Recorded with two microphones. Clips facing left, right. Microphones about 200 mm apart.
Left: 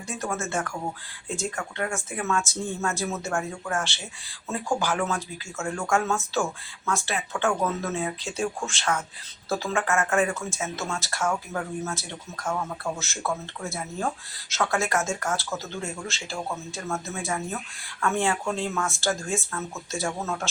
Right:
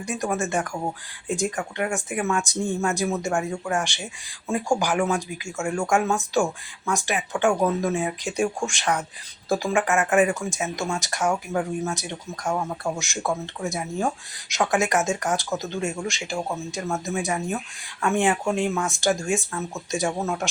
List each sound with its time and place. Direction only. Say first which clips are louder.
0.0 s speech: right 5 dB; 15° right (ahead or behind)